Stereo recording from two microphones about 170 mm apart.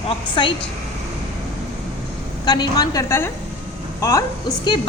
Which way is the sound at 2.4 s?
25° left (ahead or behind).